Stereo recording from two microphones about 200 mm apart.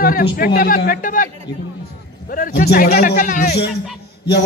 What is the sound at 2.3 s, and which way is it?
A man's voice, 50° left (ahead or behind).